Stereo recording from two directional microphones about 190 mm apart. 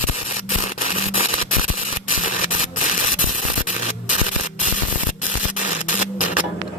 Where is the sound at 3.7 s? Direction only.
40° left (ahead or behind).